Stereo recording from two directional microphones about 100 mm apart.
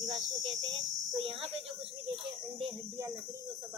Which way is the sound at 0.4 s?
65° right (ahead or behind).